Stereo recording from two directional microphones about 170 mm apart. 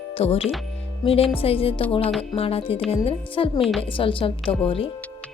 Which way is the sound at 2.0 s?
5° left (ahead or behind).